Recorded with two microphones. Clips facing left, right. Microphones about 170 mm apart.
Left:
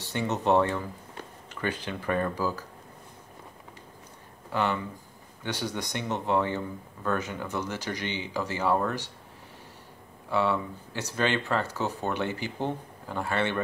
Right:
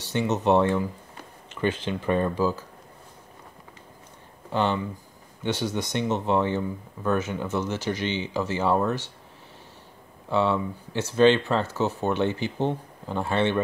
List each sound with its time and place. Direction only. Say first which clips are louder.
0.0 s speech: right 4 dB; 20° right (ahead or behind)
4.5 s speech: right 3 dB; 25° right (ahead or behind)
10.3 s speech: right 3 dB; 20° right (ahead or behind)